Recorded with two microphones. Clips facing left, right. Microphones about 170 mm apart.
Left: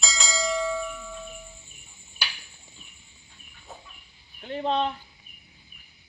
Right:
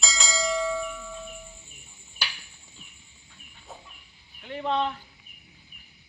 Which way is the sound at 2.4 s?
Centre (ahead or behind).